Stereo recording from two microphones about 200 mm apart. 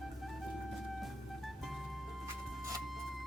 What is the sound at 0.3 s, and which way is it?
Music, centre (ahead or behind).